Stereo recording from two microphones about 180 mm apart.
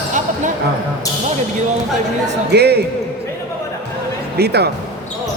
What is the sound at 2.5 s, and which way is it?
Speech, 65° right (ahead or behind).